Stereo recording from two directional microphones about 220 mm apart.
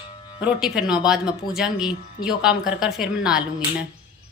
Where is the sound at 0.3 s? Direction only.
5° right (ahead or behind).